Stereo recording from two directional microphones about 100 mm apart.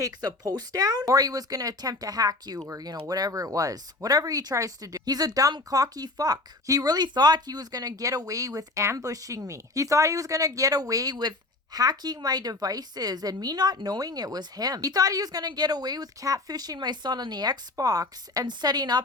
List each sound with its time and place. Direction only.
0.0 s speech: 40° right (ahead or behind)